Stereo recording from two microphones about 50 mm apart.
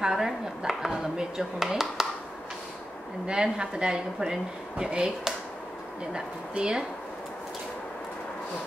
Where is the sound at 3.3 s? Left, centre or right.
Centre.